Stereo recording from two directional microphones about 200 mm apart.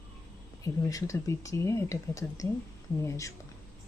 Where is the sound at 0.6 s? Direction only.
15° left (ahead or behind).